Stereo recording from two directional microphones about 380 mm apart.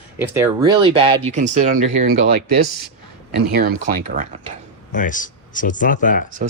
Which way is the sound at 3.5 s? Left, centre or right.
Right.